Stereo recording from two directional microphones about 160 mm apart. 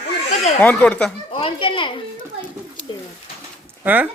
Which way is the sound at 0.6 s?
10° left (ahead or behind).